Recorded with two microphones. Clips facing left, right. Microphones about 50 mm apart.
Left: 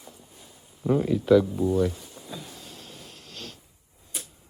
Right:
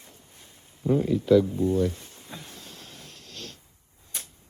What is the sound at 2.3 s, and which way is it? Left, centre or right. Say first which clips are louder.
Power windows: left 2 dB; right.